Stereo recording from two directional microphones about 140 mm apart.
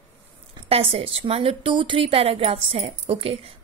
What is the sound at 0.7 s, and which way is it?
A woman's voice, 45° right (ahead or behind).